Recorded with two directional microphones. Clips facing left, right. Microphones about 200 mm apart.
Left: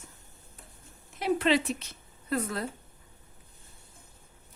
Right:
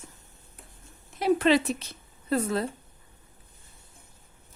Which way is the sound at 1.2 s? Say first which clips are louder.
Right 4 dB; 40° right (ahead or behind).